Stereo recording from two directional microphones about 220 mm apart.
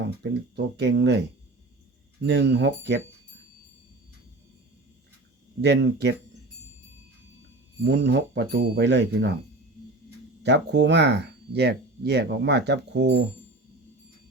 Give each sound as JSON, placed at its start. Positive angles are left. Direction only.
{"t": 0.2, "sound": "speech", "side_deg": -50}
{"t": 2.2, "sound": "speech", "side_deg": -50}
{"t": 5.6, "sound": "speech", "side_deg": -50}
{"t": 7.8, "sound": "speech", "side_deg": -50}
{"t": 10.4, "sound": "speech", "side_deg": -50}